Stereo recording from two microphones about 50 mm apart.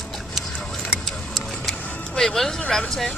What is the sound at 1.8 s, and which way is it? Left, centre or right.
Music, left.